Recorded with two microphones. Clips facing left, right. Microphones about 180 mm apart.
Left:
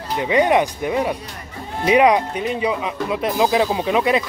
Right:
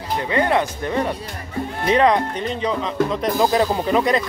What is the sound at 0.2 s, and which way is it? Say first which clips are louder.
Speech: left 4 dB; 15° left (ahead or behind).